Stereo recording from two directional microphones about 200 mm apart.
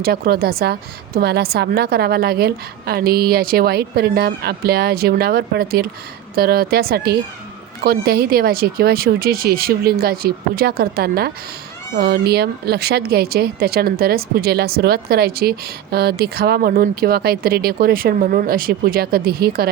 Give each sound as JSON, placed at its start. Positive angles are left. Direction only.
{"t": 0.0, "sound": "speech", "side_deg": -50}